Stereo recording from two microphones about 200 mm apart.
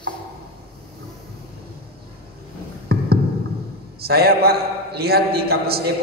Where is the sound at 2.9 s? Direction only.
50° right (ahead or behind).